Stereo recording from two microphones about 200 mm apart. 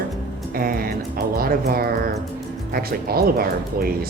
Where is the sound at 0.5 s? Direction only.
45° right (ahead or behind).